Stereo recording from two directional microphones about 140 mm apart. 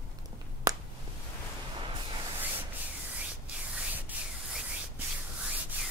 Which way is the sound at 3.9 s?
10° right (ahead or behind).